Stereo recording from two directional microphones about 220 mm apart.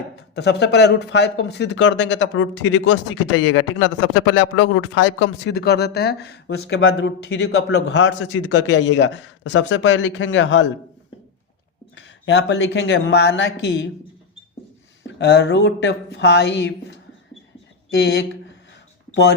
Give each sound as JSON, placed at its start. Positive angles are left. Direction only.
{"t": 0.2, "sound": "speech", "side_deg": 50}
{"t": 11.9, "sound": "speech", "side_deg": 55}
{"t": 15.0, "sound": "speech", "side_deg": 50}